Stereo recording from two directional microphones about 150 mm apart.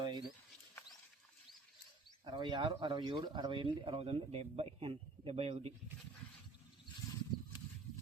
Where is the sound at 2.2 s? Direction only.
30° right (ahead or behind).